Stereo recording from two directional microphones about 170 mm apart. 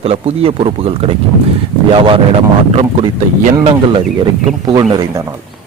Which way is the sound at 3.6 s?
30° right (ahead or behind).